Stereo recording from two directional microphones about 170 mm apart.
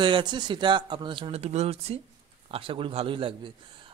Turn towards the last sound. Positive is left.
turn(degrees=-30)  # may be behind; listen again after turning